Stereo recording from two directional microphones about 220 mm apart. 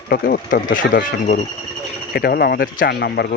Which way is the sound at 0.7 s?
60° left (ahead or behind).